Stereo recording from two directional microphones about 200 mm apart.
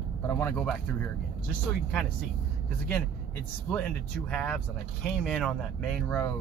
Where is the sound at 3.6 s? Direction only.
5° left (ahead or behind).